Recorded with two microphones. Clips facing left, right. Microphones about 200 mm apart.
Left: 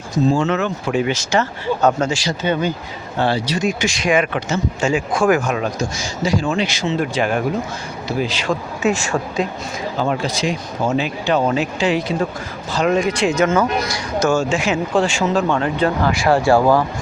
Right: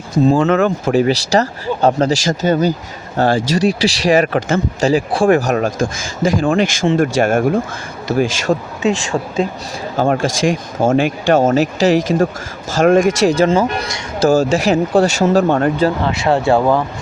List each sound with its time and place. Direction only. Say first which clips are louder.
0.3 s speech: right 5 dB; 55° right (ahead or behind)
4.8 s speech: right 3 dB; 35° right (ahead or behind)
10.0 s speech: right 6 dB; 50° right (ahead or behind)
13.3 s speech: right 3 dB; 30° right (ahead or behind)
14.3 s speech: right 6 dB; 40° right (ahead or behind)
15.8 s speech: right 2 dB; 25° right (ahead or behind)